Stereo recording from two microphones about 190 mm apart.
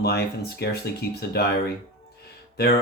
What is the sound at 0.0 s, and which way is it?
Speech, 60° left (ahead or behind).